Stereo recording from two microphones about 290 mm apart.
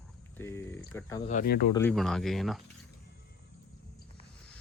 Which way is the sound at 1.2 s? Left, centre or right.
Left.